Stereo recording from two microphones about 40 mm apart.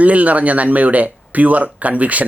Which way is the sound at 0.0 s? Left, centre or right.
Right.